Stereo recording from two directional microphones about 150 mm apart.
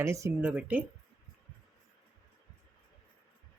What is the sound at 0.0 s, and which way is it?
Speech, 20° right (ahead or behind).